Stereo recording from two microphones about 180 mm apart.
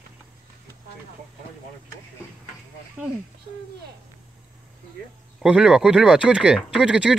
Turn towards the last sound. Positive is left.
turn(degrees=-5)  # may be behind; listen again after turning